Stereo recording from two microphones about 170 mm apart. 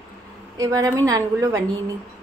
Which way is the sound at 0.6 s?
20° right (ahead or behind).